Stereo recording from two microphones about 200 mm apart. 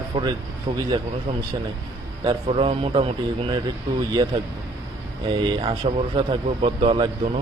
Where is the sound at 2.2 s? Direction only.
25° right (ahead or behind).